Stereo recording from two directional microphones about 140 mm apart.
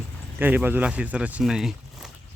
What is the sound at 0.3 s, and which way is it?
Speech, 15° right (ahead or behind).